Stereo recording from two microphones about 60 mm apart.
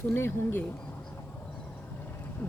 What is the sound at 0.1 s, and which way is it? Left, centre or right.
Speech, left.